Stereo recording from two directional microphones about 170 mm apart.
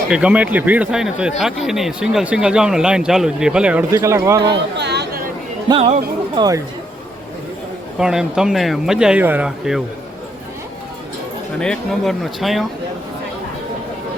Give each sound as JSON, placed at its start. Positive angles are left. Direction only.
{"t": 0.1, "sound": "speech", "side_deg": -5}
{"t": 3.9, "sound": "a man's voice", "side_deg": -15}
{"t": 4.8, "sound": "chatter", "side_deg": -80}
{"t": 6.3, "sound": "a man's voice", "side_deg": -25}
{"t": 7.9, "sound": "speech", "side_deg": -5}
{"t": 11.6, "sound": "speech", "side_deg": 5}